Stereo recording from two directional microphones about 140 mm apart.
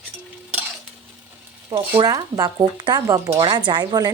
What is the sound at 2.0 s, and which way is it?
Speech, 25° right (ahead or behind).